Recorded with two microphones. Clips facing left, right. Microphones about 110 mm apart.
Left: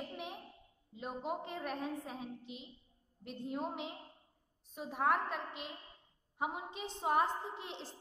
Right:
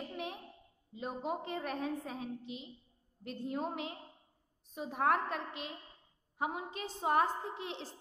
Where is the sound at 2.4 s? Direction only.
80° right.